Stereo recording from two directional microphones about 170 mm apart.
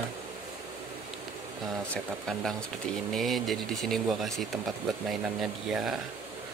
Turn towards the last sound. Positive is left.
turn(degrees=0)  # may be behind; listen again after turning